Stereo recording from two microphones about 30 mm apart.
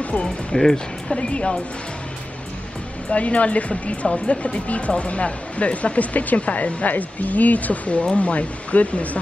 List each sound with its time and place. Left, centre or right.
0.5 s speech: centre
3.1 s a woman's voice: left